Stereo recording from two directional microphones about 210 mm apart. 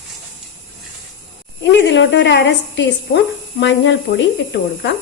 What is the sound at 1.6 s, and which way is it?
Speech, 55° left (ahead or behind).